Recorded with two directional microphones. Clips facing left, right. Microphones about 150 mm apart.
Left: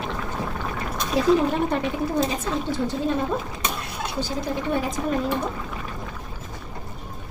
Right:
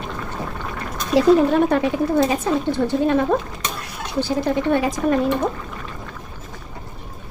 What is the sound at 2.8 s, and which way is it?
A woman's voice, 65° right (ahead or behind).